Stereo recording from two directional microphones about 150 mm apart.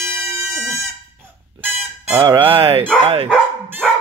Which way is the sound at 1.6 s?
15° right (ahead or behind).